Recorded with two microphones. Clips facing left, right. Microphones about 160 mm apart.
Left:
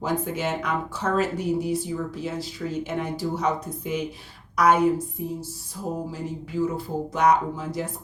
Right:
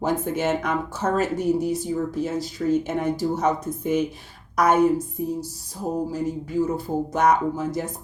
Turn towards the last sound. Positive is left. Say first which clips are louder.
# right 1 dB
turn(degrees=-45)  # may be behind; listen again after turning